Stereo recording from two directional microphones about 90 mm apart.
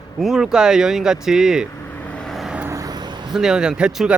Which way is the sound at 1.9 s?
15° left (ahead or behind).